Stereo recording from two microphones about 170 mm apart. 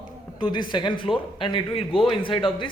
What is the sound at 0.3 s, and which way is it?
A man's voice, 30° left (ahead or behind).